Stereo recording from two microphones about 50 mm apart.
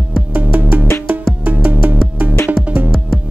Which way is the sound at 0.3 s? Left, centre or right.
Right.